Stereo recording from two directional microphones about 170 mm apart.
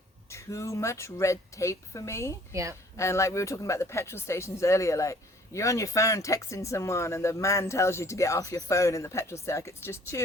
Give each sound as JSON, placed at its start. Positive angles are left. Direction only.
{"t": 0.3, "sound": "speech", "side_deg": 15}
{"t": 2.5, "sound": "a woman's voice", "side_deg": -20}
{"t": 3.0, "sound": "speech", "side_deg": 15}